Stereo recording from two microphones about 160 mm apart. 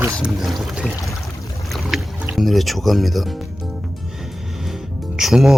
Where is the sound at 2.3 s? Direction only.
Centre (ahead or behind).